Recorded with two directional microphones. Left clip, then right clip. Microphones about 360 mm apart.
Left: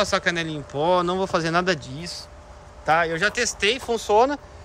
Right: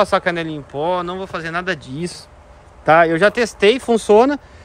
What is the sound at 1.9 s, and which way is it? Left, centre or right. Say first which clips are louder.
Speech: right 6 dB; centre.